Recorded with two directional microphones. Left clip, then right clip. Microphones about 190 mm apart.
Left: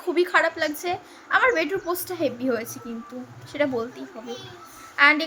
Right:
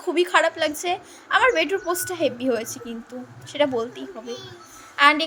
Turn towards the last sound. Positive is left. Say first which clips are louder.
# right 1 dB
turn(degrees=-20)  # may be behind; listen again after turning